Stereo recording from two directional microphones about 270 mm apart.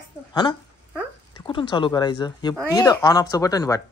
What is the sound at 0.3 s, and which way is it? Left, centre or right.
Speech, centre.